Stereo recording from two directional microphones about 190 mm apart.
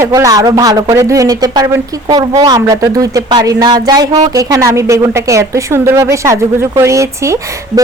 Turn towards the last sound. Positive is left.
turn(degrees=-15)  # may be behind; listen again after turning